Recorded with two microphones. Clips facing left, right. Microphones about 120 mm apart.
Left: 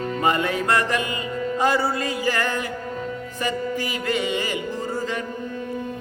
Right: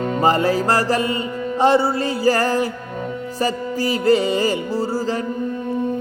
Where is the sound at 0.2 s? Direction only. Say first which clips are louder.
Right 5 dB; 35° right (ahead or behind).